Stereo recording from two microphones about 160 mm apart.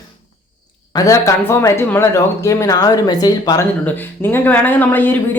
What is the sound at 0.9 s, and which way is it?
Speech, 20° left (ahead or behind).